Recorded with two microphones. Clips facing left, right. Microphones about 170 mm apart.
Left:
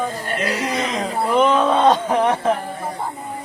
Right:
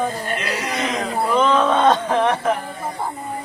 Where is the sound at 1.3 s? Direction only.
15° left (ahead or behind).